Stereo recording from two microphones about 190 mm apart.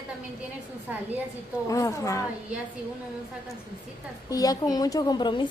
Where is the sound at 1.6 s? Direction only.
15° left (ahead or behind).